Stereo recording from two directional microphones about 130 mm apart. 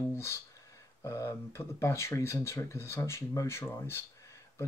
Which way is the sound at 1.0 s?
20° left (ahead or behind).